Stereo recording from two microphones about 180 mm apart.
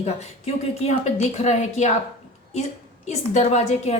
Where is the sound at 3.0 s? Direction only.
40° left (ahead or behind).